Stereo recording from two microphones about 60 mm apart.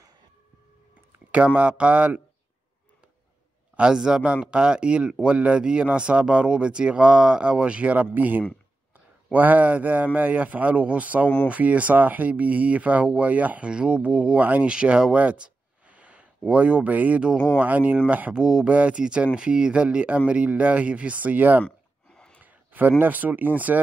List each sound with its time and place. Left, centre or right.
1.3 s speech: right
3.7 s a man's voice: centre
18.4 s speech: centre
18.7 s speech: right
21.6 s a sound: centre
22.4 s speech: right